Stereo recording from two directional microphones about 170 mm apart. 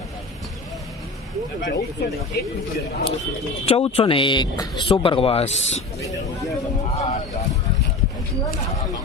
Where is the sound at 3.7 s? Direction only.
35° left (ahead or behind).